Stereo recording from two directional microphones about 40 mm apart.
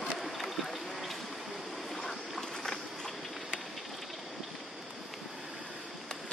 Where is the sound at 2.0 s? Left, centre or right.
Centre.